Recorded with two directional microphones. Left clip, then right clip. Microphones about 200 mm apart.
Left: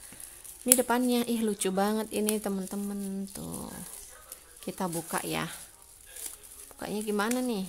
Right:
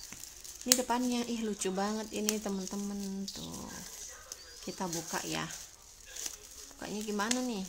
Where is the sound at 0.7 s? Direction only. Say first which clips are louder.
Left 6 dB; 30° left (ahead or behind).